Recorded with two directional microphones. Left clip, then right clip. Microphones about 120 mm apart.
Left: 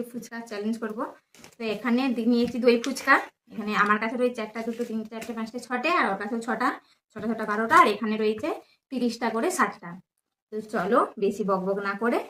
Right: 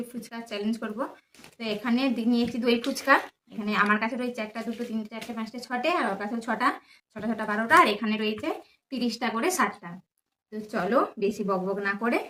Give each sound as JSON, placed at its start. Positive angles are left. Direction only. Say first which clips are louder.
{"t": 0.2, "sound": "speech", "louder": "even", "side_deg": -30}
{"t": 7.7, "sound": "speech", "louder": "left 1 dB", "side_deg": -25}
{"t": 10.5, "sound": "speech", "louder": "left 2 dB", "side_deg": -30}